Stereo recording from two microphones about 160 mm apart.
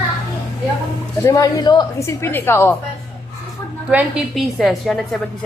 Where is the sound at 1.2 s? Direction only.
20° left (ahead or behind).